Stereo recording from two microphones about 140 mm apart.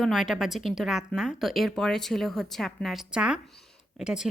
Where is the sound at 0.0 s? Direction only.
Centre (ahead or behind).